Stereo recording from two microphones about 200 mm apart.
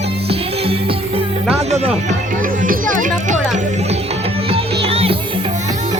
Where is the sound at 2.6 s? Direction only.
40° right (ahead or behind).